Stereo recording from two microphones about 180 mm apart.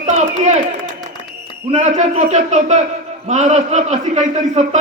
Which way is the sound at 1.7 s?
40° right (ahead or behind).